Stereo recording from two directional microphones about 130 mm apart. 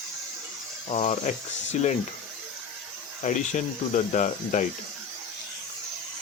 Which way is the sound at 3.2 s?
65° left (ahead or behind).